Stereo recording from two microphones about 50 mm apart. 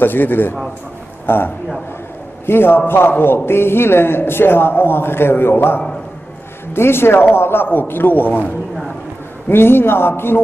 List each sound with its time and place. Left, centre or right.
0.0 s a man's voice: left
9.5 s a man's voice: left